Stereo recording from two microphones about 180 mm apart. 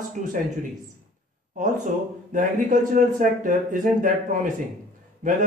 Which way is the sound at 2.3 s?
45° right (ahead or behind).